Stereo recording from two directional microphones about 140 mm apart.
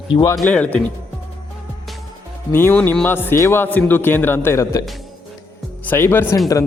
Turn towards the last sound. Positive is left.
turn(degrees=15)  # may be behind; listen again after turning